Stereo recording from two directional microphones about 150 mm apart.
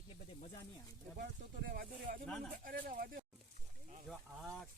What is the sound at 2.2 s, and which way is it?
Speech, 5° left (ahead or behind).